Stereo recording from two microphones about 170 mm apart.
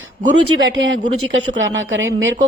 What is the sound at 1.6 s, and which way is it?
Speech, 90° right.